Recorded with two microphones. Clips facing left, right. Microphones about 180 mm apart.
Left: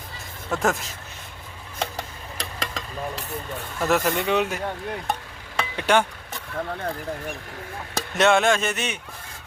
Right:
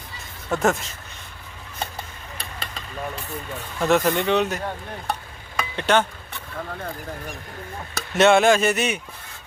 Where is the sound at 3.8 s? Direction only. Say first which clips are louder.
Right 3 dB; centre (ahead or behind).